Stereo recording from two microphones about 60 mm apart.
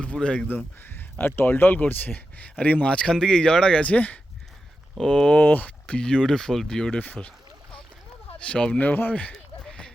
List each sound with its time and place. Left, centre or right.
0.0 s speech: centre
0.4 s speech: left
4.9 s speech: centre
5.4 s speech: left; by 7.0 s centre
7.0 s boat: left
8.4 s speech: centre
8.8 s speech: left
9.3 s a sound: centre